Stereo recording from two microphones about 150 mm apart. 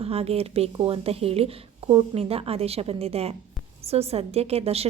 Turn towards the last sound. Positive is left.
turn(degrees=-40)  # may be behind; listen again after turning